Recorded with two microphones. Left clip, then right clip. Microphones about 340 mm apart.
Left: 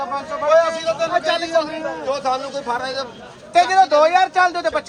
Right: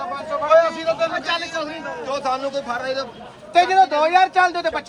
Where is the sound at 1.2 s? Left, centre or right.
Centre.